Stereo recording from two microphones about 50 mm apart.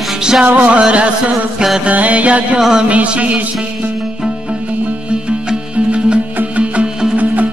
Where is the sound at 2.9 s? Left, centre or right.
Right.